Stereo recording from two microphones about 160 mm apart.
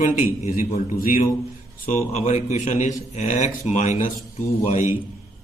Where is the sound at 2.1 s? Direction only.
45° left (ahead or behind).